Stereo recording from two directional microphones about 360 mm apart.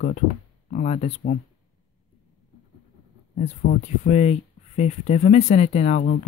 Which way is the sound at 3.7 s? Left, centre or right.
Left.